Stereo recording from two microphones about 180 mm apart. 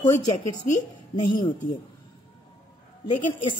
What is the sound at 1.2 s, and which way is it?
Speech, 25° left (ahead or behind).